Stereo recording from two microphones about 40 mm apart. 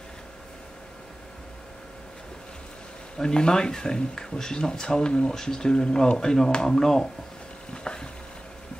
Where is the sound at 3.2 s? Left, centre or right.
Centre.